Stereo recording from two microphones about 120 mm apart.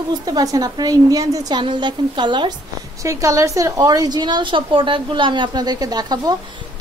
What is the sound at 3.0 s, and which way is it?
A woman's voice, 25° right (ahead or behind).